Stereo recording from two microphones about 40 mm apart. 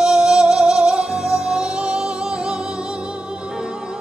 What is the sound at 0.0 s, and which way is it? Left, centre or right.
Music, centre.